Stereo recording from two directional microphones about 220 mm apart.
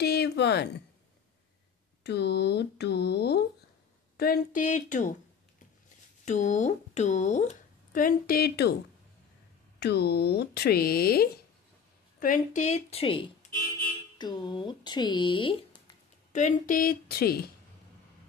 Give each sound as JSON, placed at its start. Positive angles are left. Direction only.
{"t": 0.0, "sound": "a sound", "side_deg": 50}
{"t": 2.0, "sound": "a woman's voice", "side_deg": 50}
{"t": 6.2, "sound": "speech", "side_deg": 35}
{"t": 9.8, "sound": "a woman's voice", "side_deg": 50}
{"t": 16.3, "sound": "a woman's voice", "side_deg": 35}